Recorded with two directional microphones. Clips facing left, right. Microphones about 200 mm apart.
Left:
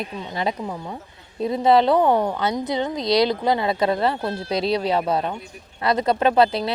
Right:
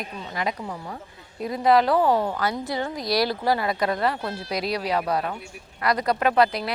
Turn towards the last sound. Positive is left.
turn(degrees=25)  # may be behind; listen again after turning